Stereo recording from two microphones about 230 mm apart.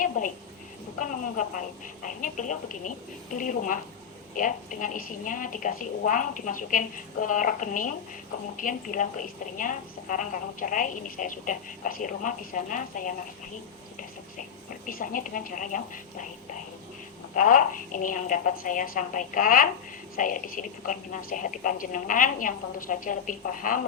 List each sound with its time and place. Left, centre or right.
0.2 s a woman's voice: left
14.8 s a woman's voice: left
17.3 s a woman's voice: left